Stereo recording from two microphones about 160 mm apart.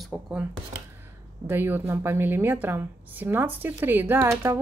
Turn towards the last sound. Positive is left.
turn(degrees=-15)  # may be behind; listen again after turning